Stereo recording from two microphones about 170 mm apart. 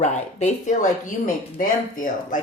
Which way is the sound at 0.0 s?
40° left (ahead or behind).